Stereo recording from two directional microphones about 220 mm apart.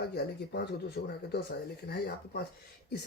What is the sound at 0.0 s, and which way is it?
Speech, 50° left (ahead or behind).